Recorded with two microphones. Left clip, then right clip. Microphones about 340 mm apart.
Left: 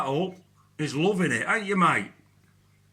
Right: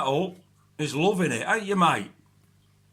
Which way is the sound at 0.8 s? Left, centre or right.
Centre.